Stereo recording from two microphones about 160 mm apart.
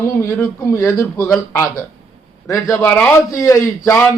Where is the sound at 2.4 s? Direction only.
20° left (ahead or behind).